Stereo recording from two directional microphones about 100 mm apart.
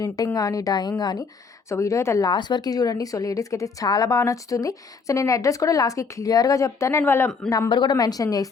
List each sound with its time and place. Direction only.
0.3 s a woman's voice: 35° left (ahead or behind)
1.7 s speech: 30° left (ahead or behind)
2.3 s a woman's voice: 45° left (ahead or behind); by 7.3 s 25° left (ahead or behind)
7.7 s a woman's voice: 50° left (ahead or behind)